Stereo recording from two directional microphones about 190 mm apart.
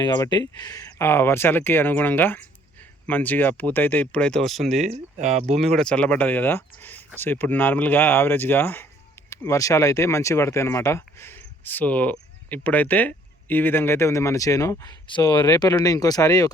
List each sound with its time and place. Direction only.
0.0 s speech: 20° left (ahead or behind); by 4.9 s centre (ahead or behind)
4.9 s speech: 35° right (ahead or behind)
5.5 s speech: centre (ahead or behind); by 16.5 s 20° left (ahead or behind)